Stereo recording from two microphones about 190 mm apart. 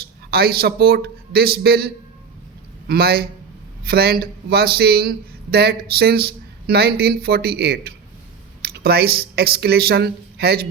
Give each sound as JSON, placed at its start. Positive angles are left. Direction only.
{"t": 0.0, "sound": "a man's voice", "side_deg": -55}